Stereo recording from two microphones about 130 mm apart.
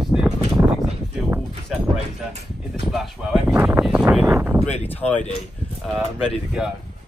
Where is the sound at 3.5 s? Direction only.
15° right (ahead or behind).